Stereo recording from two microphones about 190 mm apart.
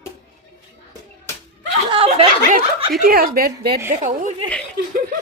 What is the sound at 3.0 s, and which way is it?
Speech, 50° right (ahead or behind).